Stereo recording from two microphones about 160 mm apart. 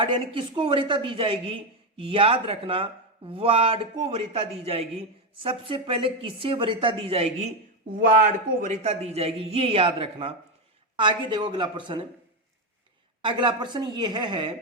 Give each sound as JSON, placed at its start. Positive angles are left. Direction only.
{"t": 0.0, "sound": "speech", "side_deg": -30}
{"t": 7.9, "sound": "speech", "side_deg": -60}
{"t": 13.2, "sound": "a woman's voice", "side_deg": -30}